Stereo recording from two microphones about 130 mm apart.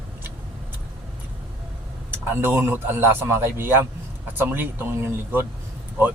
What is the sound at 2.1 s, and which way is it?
A man's voice, 15° right (ahead or behind).